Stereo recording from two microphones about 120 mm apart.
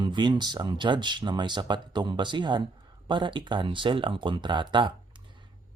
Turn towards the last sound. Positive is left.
turn(degrees=-40)  # may be behind; listen again after turning